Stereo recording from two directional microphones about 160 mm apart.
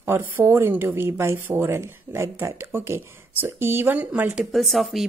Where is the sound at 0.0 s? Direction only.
15° right (ahead or behind).